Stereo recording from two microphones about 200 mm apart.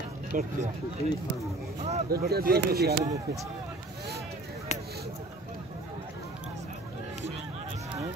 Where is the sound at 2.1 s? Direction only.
50° right (ahead or behind).